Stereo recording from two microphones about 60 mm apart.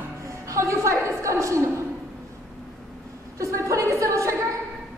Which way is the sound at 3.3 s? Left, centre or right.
Right.